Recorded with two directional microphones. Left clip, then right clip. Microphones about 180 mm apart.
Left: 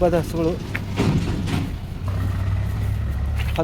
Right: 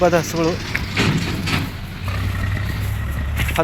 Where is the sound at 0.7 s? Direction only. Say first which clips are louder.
Right 6 dB; 15° right (ahead or behind).